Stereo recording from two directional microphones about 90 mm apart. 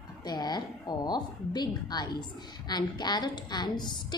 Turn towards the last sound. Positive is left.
turn(degrees=55)  # may be behind; listen again after turning